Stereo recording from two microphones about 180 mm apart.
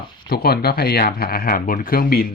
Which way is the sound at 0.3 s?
60° left (ahead or behind).